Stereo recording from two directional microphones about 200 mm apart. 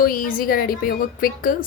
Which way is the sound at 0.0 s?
45° left (ahead or behind).